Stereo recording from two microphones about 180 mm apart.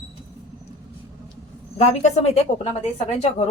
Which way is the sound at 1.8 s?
40° left (ahead or behind).